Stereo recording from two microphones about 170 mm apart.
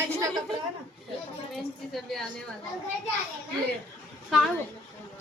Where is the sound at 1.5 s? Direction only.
Centre (ahead or behind).